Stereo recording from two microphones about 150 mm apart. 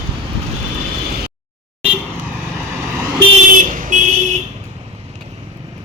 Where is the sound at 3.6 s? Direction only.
60° right (ahead or behind).